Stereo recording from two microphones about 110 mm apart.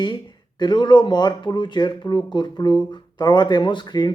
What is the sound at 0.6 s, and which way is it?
Speech, 45° left (ahead or behind).